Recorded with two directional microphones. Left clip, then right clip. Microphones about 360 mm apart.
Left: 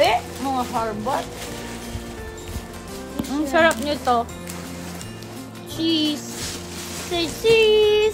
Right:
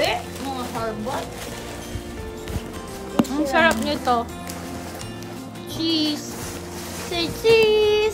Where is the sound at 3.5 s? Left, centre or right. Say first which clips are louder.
Left 1 dB; centre.